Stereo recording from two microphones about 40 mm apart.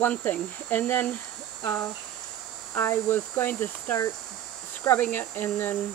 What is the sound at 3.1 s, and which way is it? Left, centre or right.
Speech, left.